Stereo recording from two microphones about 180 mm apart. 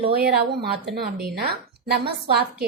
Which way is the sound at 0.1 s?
60° right (ahead or behind).